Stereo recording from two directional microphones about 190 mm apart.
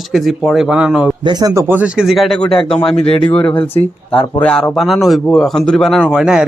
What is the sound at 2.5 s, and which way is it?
Speech, 30° left (ahead or behind).